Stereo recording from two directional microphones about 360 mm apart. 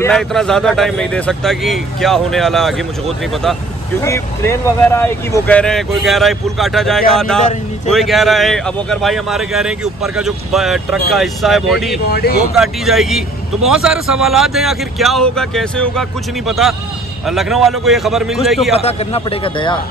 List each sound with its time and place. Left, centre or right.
0.0 s speech: centre
4.0 s speech: centre
12.1 s speech: left
12.5 s speech: centre
18.8 s a man's voice: centre